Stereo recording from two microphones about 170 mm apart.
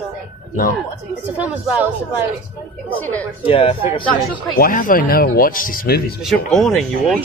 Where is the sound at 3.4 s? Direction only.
35° left (ahead or behind).